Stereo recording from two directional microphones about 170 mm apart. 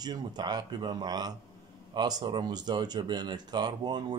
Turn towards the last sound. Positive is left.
turn(degrees=-25)  # may be behind; listen again after turning